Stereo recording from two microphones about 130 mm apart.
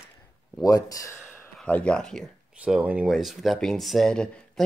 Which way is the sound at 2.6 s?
10° right (ahead or behind).